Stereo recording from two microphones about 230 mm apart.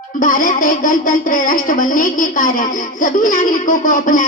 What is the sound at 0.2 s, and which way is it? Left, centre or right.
A woman's voice, left.